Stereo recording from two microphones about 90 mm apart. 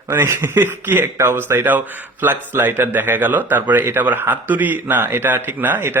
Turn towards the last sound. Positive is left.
turn(degrees=-25)  # may be behind; listen again after turning